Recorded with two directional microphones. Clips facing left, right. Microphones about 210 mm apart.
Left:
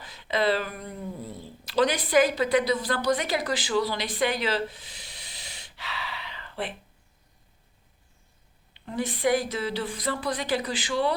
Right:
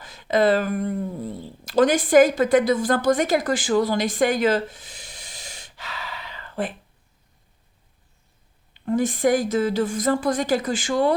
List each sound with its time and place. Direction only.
0.0 s a woman's voice: 45° right (ahead or behind)
8.7 s speech: 50° right (ahead or behind)